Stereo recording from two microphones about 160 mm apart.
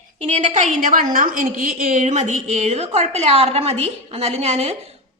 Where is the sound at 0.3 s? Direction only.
45° right (ahead or behind).